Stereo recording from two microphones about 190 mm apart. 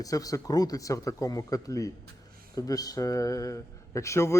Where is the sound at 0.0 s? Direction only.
20° left (ahead or behind).